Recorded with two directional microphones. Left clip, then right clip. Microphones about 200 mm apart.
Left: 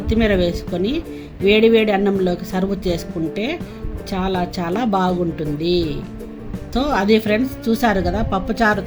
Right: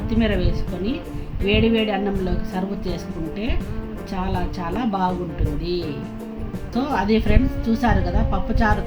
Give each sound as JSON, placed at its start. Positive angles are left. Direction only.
{"t": 0.1, "sound": "speech", "side_deg": 60}
{"t": 6.7, "sound": "speech", "side_deg": 65}